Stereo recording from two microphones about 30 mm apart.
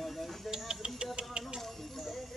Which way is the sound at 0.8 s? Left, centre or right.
Right.